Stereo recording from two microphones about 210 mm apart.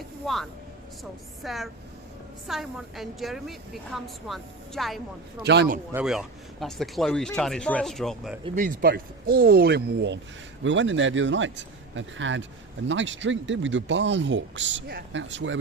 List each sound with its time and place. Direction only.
0.2 s a woman's voice: centre (ahead or behind)
5.5 s speech: 55° right (ahead or behind)
5.9 s a woman's voice: 5° right (ahead or behind)
8.5 s speech: 40° right (ahead or behind); by 15.5 s 60° right (ahead or behind)